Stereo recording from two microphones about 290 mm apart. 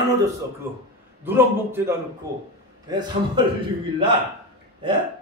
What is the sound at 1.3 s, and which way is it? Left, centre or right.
A man's voice, centre.